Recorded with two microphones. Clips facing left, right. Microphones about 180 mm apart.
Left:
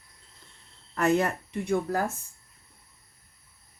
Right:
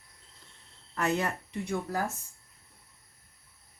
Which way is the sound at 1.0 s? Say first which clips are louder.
Left 5 dB; 50° left (ahead or behind).